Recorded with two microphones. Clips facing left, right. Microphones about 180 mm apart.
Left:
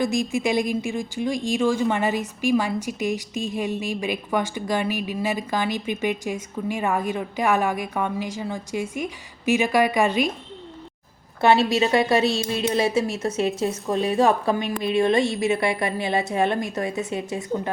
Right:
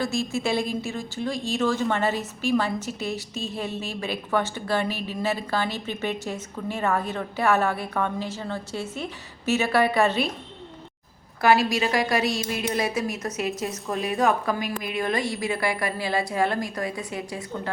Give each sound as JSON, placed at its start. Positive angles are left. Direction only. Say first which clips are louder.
{"t": 0.0, "sound": "a woman's voice", "louder": "left 3 dB", "side_deg": 15}
{"t": 11.3, "sound": "a woman's voice", "louder": "left 2 dB", "side_deg": 25}